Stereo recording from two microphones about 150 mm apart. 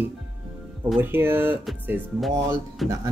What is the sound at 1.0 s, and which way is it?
Speech, 15° right (ahead or behind).